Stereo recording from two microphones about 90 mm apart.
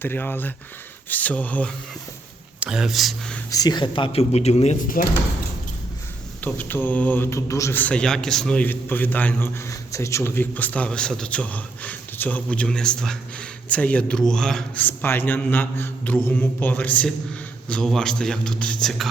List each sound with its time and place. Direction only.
0.0 s mantra: 25° left (ahead or behind)
1.1 s a man's voice: 15° left (ahead or behind)
2.6 s speech: 5° right (ahead or behind)
3.5 s speech: 50° left (ahead or behind); by 4.3 s 80° left
6.4 s mantra: 20° left (ahead or behind)
7.3 s a man's voice: 35° left (ahead or behind)
7.7 s a man's voice: 15° left (ahead or behind)
9.6 s a man's voice: 35° left (ahead or behind); by 14.6 s 5° left (ahead or behind)
14.8 s mantra: 20° left (ahead or behind)
17.7 s a man's voice: 5° left (ahead or behind)